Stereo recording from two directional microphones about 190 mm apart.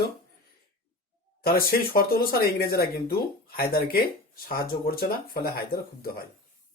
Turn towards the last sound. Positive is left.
turn(degrees=55)  # may be behind; listen again after turning